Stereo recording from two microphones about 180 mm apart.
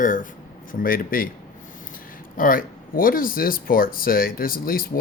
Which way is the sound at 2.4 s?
50° left (ahead or behind).